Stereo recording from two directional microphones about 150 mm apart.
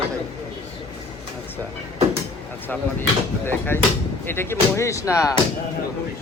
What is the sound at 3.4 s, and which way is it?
Speech, 15° left (ahead or behind).